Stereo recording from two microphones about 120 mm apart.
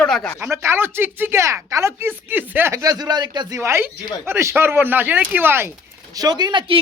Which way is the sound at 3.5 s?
20° right (ahead or behind).